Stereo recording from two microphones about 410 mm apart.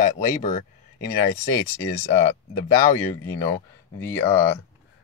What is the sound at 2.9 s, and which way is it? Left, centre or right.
Speech, centre.